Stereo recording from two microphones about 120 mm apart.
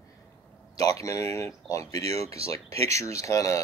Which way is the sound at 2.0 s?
60° right (ahead or behind).